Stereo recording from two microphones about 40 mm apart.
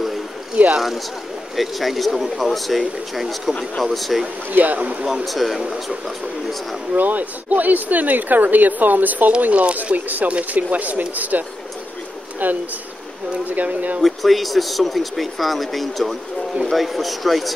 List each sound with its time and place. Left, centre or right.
0.7 s speech: centre
4.5 s speech: right
5.0 s speech: centre
5.6 s speech: centre
6.9 s speech: right
14.0 s speech: centre